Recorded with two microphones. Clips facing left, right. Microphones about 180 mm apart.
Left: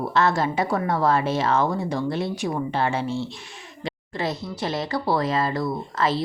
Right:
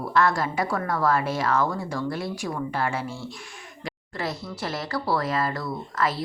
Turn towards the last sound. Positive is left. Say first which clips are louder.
# left 3 dB
turn(degrees=25)  # may be behind; listen again after turning